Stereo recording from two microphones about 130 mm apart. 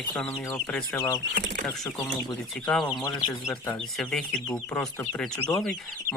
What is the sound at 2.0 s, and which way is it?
Speech, 25° left (ahead or behind).